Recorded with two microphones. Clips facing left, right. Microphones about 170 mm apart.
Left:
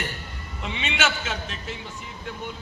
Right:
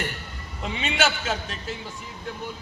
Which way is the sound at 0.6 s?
35° right (ahead or behind).